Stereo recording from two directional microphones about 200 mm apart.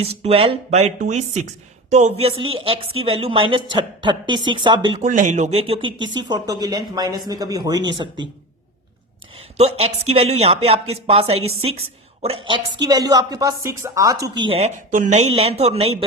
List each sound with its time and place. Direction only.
0.0 s a woman's voice: 30° right (ahead or behind)
4.9 s a woman's voice: 40° right (ahead or behind); by 8.2 s 25° right (ahead or behind)
9.6 s a woman's voice: 30° right (ahead or behind)
14.8 s speech: 40° right (ahead or behind)